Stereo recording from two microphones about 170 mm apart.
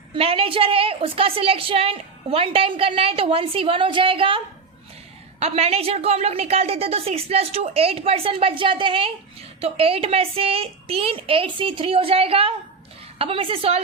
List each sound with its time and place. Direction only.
0.1 s a woman's voice: 35° right (ahead or behind)